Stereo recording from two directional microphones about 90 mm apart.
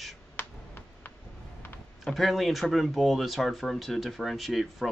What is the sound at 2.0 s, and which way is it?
Speech, centre (ahead or behind).